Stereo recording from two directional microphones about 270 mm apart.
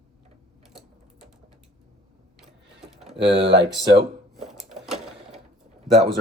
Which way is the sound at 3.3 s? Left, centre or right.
Right.